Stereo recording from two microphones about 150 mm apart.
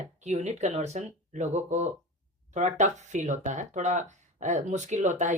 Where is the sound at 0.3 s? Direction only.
50° right (ahead or behind).